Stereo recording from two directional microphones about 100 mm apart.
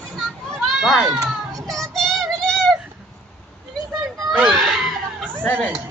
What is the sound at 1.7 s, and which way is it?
Child singing, 5° left (ahead or behind).